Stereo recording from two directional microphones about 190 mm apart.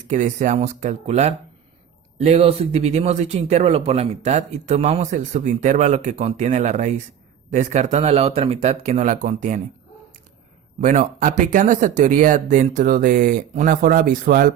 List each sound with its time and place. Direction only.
0.1 s speech: 40° right (ahead or behind)
10.8 s speech: 40° right (ahead or behind)